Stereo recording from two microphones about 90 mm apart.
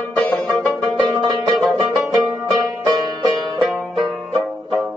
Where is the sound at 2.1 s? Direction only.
45° right (ahead or behind).